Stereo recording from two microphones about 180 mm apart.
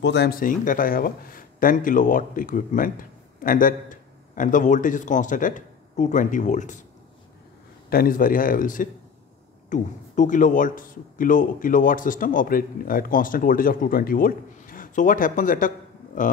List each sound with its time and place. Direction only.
0.0 s a man's voice: 70° left (ahead or behind); by 6.8 s 45° left (ahead or behind)
7.9 s a man's voice: 55° left (ahead or behind)